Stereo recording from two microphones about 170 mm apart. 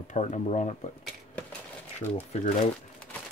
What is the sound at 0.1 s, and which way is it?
Speech, 45° left (ahead or behind).